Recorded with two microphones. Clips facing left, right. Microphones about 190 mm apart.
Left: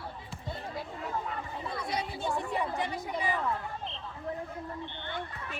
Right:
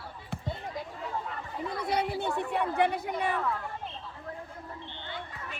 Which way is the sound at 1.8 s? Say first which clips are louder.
Right 6 dB; 60° right (ahead or behind).